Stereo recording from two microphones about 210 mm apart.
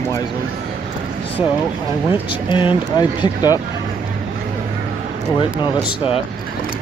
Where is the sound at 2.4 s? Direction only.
20° left (ahead or behind).